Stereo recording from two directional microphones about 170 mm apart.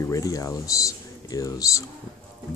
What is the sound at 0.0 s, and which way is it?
Speech, 20° left (ahead or behind).